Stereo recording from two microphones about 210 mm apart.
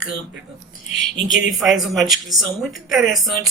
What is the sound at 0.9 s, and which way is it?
Speech, 65° right (ahead or behind).